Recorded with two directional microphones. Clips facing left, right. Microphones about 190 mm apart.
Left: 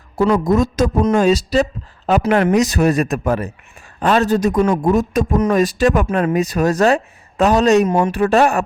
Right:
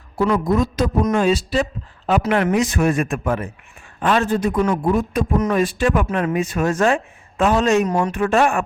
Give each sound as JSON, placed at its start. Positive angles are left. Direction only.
{"t": 0.2, "sound": "a man's voice", "side_deg": 45}
{"t": 7.9, "sound": "speech", "side_deg": 25}
{"t": 8.1, "sound": "speech", "side_deg": 35}